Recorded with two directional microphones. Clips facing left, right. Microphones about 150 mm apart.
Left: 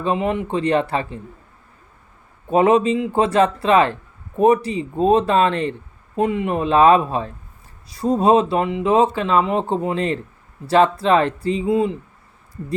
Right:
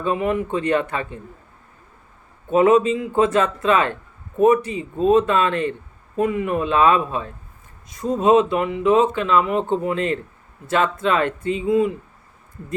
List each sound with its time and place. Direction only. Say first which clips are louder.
0.0 s speech: even; 25° left (ahead or behind)
2.5 s speech: even; 30° left (ahead or behind)